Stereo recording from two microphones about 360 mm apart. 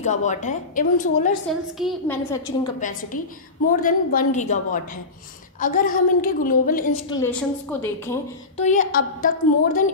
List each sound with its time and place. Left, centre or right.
0.0 s a woman's voice: centre
1.5 s a woman's voice: centre
2.8 s a woman's voice: left
7.1 s a woman's voice: centre
8.5 s a woman's voice: centre